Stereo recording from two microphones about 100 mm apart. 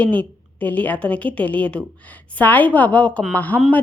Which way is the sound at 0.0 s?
15° left (ahead or behind).